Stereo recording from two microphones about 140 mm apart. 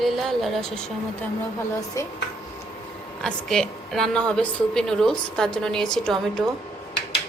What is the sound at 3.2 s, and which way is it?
A woman's voice, 5° left (ahead or behind).